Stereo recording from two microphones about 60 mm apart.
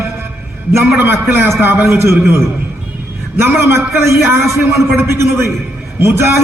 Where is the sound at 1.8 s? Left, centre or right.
Right.